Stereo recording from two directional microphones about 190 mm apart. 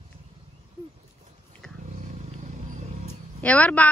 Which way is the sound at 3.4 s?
5° left (ahead or behind).